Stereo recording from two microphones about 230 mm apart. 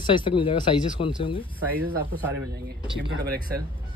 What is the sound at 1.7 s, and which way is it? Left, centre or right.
Speech, centre.